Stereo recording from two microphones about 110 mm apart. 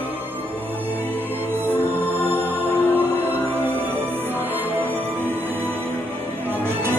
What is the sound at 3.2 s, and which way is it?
Music, 20° right (ahead or behind).